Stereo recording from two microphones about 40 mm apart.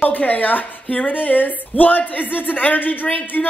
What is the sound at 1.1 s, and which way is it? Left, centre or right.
A man's voice, left.